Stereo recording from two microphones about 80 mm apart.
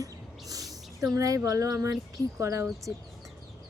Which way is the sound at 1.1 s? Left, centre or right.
Right.